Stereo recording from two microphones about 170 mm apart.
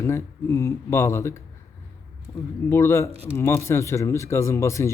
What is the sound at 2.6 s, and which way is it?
A man's voice, 15° left (ahead or behind).